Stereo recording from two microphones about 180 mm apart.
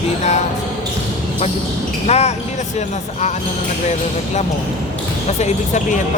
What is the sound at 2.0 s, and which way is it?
Speech, 35° left (ahead or behind).